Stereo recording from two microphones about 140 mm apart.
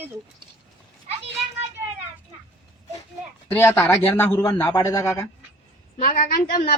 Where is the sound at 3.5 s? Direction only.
15° left (ahead or behind).